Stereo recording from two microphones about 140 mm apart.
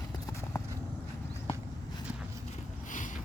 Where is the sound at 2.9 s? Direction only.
65° left (ahead or behind).